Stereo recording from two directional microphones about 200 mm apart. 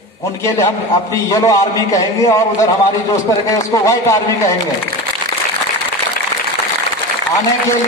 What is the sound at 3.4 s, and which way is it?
A man's voice, 15° left (ahead or behind).